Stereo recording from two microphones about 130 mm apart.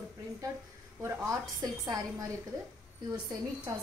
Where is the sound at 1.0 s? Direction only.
20° right (ahead or behind).